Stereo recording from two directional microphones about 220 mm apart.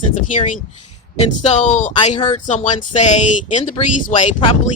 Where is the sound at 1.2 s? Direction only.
30° left (ahead or behind).